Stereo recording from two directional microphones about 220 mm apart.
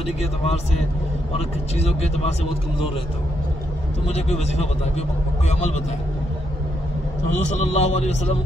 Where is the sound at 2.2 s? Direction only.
30° left (ahead or behind).